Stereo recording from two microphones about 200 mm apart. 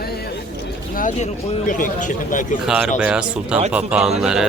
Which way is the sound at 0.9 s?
40° left (ahead or behind).